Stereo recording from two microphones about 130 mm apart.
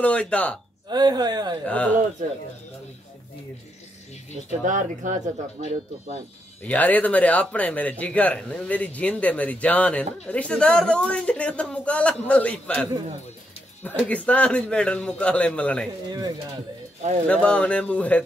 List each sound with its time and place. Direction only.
0.0 s speech: 10° left (ahead or behind)
0.8 s speech: 30° right (ahead or behind)
1.7 s speech: 10° left (ahead or behind)
4.5 s speech: 75° right (ahead or behind)
6.7 s speech: 10° left (ahead or behind)
13.8 s speech: 10° left (ahead or behind)
17.3 s speech: 10° left (ahead or behind)